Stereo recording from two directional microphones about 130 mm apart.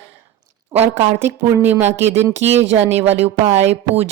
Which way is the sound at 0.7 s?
15° right (ahead or behind).